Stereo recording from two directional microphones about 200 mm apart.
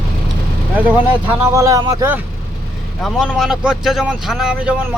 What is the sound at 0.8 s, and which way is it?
Speech, 10° right (ahead or behind).